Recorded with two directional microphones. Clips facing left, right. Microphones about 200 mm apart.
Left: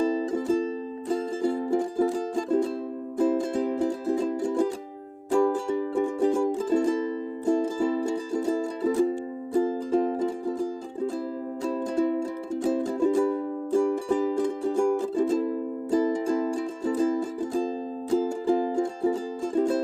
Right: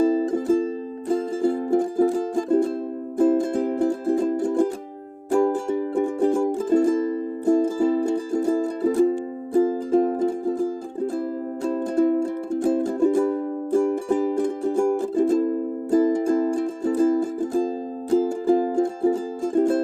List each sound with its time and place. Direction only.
0.0 s music: 50° right (ahead or behind)